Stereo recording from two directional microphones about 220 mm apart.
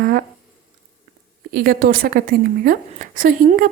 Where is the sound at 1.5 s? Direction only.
40° right (ahead or behind).